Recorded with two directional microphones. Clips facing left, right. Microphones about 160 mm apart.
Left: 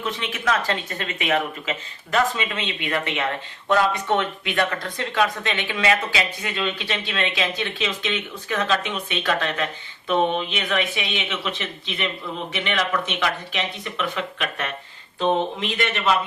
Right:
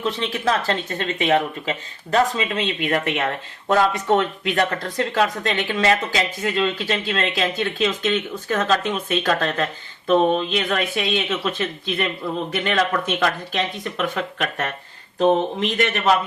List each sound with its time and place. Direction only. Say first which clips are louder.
0.0 s speech: right 4 dB; 35° right (ahead or behind)